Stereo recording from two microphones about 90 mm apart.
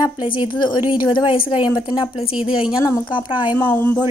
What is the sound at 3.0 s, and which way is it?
Speech, 60° left (ahead or behind).